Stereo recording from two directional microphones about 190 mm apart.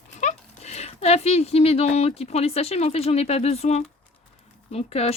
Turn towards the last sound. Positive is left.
turn(degrees=35)  # may be behind; listen again after turning